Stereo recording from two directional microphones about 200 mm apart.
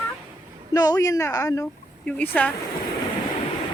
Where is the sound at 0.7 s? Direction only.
20° left (ahead or behind).